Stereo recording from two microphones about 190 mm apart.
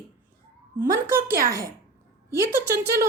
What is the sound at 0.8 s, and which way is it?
A woman's voice, 15° right (ahead or behind).